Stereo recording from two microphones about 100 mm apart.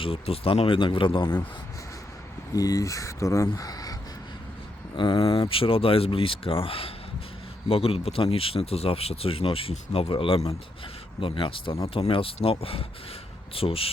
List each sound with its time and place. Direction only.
0.0 s speech: 70° left (ahead or behind)
2.6 s speech: 35° left (ahead or behind)
4.9 s speech: 45° left (ahead or behind)
5.5 s speech: 65° left (ahead or behind)